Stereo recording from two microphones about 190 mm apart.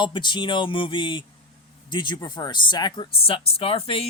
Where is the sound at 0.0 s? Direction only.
25° left (ahead or behind).